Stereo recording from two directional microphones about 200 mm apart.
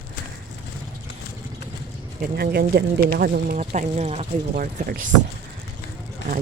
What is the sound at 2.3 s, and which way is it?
Speech, 50° right (ahead or behind).